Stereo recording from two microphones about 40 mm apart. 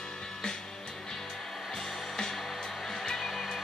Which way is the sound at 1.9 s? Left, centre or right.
Centre.